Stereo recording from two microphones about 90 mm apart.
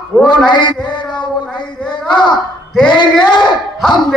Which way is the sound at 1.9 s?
60° left (ahead or behind).